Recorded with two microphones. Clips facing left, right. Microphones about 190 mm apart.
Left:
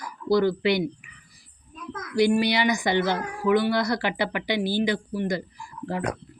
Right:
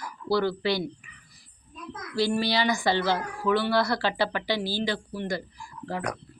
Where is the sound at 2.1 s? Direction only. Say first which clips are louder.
Left 4 dB; 20° left (ahead or behind).